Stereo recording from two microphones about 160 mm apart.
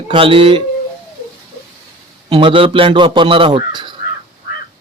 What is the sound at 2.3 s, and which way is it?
Speech, 35° right (ahead or behind).